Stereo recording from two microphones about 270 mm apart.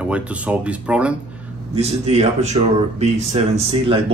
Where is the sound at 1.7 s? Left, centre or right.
Right.